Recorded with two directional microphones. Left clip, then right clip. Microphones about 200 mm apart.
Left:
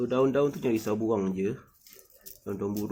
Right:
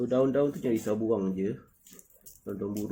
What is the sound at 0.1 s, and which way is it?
Speech, 15° left (ahead or behind).